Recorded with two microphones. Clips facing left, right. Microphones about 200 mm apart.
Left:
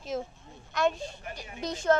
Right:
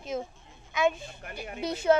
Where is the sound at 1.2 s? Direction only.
60° right (ahead or behind).